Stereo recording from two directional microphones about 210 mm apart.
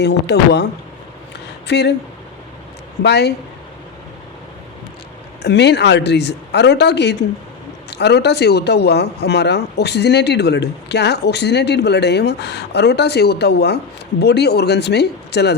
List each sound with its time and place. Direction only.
0.0 s speech: 50° left (ahead or behind)
3.0 s speech: 50° left (ahead or behind)
5.4 s speech: 55° left (ahead or behind)